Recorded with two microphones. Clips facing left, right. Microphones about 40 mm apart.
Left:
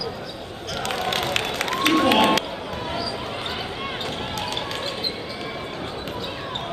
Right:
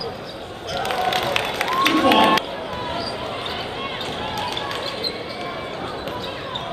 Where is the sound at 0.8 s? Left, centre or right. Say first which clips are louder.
Right 4 dB; centre.